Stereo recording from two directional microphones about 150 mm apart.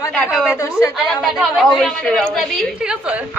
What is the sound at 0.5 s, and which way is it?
Speech, 20° left (ahead or behind).